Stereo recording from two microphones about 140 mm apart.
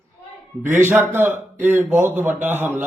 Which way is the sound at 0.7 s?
15° right (ahead or behind).